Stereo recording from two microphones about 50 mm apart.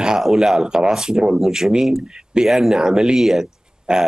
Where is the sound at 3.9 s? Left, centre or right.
Centre.